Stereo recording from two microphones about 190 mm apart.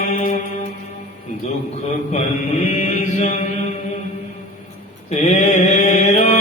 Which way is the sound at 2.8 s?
35° left (ahead or behind).